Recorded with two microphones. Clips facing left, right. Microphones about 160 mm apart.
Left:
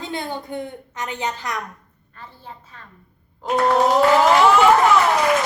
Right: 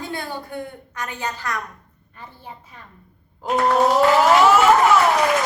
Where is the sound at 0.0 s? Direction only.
20° left (ahead or behind).